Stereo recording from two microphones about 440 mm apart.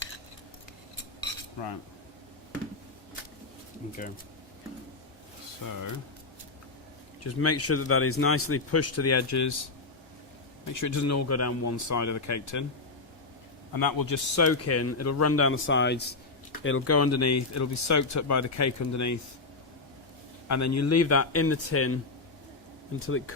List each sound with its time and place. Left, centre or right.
1.5 s speech: left
5.6 s speech: left
7.3 s speech: left
10.7 s speech: left
13.7 s speech: left
20.5 s speech: left
23.0 s speech: left